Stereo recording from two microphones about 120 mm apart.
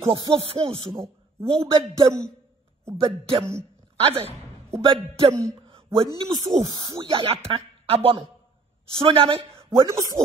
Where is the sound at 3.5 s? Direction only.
55° right (ahead or behind).